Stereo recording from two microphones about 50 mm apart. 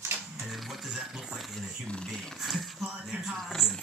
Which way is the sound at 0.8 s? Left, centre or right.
Centre.